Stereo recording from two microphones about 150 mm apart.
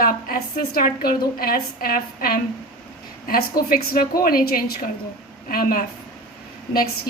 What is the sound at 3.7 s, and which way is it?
A woman's voice, 80° left.